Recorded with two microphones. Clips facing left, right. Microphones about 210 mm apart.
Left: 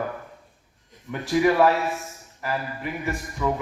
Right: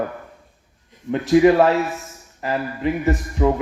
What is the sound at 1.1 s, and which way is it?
A man's voice, 20° right (ahead or behind).